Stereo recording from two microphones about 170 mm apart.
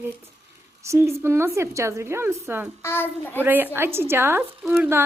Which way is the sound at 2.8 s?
10° left (ahead or behind).